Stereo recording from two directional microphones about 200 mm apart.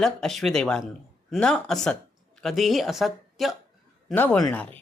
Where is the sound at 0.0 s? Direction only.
Centre (ahead or behind).